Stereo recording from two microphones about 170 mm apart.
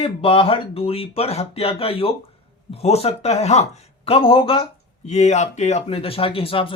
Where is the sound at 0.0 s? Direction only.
35° left (ahead or behind).